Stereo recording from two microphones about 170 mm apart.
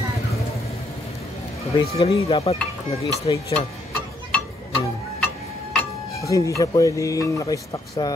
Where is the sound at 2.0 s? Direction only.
35° left (ahead or behind).